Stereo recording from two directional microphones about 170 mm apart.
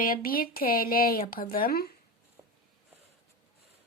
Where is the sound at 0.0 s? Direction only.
60° left (ahead or behind).